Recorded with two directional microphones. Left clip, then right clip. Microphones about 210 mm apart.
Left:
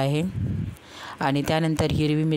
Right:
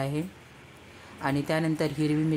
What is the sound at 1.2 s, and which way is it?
Speech, 45° left (ahead or behind).